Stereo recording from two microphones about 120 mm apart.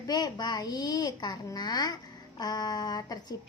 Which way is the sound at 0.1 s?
35° left (ahead or behind).